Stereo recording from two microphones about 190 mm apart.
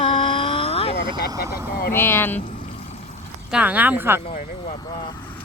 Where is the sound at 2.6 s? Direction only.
35° left (ahead or behind).